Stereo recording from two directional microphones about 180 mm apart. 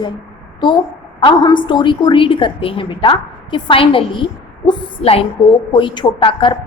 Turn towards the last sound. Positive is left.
turn(degrees=30)  # may be behind; listen again after turning